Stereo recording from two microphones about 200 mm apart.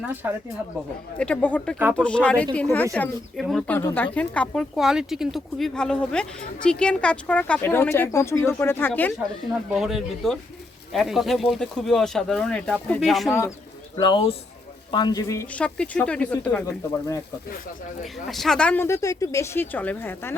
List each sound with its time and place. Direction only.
0.0 s speech: 10° right (ahead or behind)
1.2 s a woman's voice: 5° left (ahead or behind)
9.7 s a woman's voice: centre (ahead or behind)
13.9 s speech: 25° left (ahead or behind); by 20.3 s 10° left (ahead or behind)